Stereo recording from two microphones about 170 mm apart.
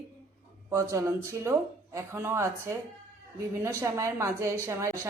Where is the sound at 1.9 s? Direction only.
15° right (ahead or behind).